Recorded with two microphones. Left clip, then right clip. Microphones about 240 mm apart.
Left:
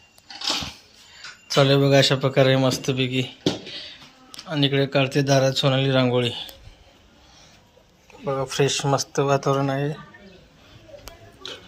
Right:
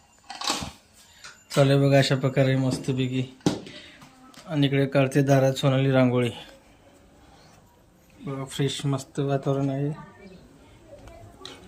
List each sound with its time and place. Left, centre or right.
1.5 s speech: centre
8.2 s speech: centre
9.2 s speech: left